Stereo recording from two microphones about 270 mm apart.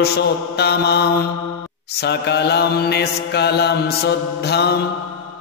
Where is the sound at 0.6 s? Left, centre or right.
Left.